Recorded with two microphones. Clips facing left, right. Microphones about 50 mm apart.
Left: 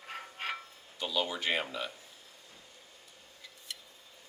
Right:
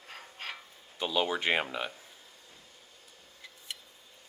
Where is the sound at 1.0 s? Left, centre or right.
Right.